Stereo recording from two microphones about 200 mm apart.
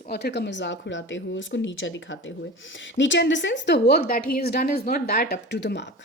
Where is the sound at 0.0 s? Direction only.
55° left (ahead or behind).